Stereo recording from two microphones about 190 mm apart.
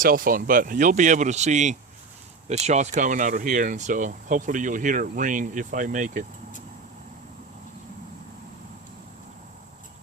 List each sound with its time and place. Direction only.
0.0 s speech: 45° right (ahead or behind)